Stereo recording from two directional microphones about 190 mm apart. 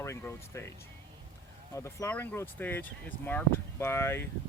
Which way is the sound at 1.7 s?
15° left (ahead or behind).